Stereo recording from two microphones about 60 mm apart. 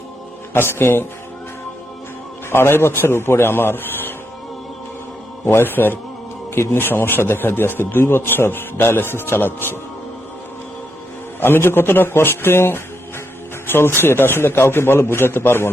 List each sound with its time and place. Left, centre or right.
0.5 s a man's voice: left
2.5 s a man's voice: left
5.5 s a man's voice: left
11.3 s a man's voice: left